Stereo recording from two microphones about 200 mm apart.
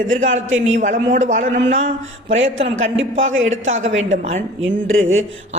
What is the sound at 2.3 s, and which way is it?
Speech, 70° right (ahead or behind).